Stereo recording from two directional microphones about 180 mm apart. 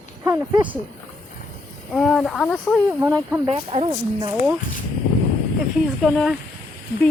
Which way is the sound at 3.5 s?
30° right (ahead or behind).